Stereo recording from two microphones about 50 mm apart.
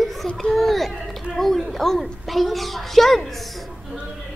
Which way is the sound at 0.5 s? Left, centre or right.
Centre.